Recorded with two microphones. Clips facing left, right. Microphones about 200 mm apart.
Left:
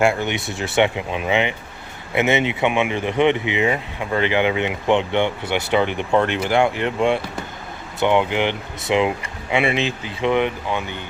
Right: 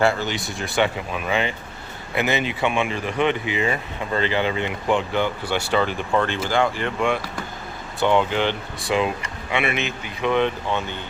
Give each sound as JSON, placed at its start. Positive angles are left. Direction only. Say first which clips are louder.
{"t": 0.0, "sound": "speech", "louder": "left 2 dB", "side_deg": 20}